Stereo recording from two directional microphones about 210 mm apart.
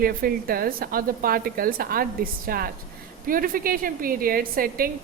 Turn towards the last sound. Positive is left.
turn(degrees=-45)  # may be behind; listen again after turning